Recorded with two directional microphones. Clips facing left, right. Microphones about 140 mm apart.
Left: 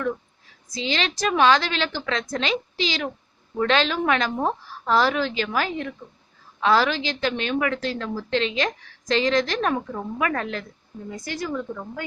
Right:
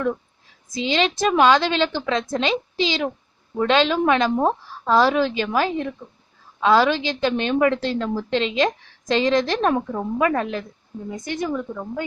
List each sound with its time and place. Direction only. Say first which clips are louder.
0.7 s a woman's voice: right 5 dB; 20° right (ahead or behind)